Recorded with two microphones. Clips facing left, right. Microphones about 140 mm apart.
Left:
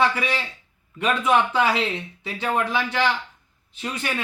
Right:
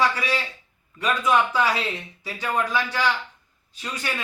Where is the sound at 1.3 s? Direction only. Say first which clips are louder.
Left 1 dB; 25° left (ahead or behind).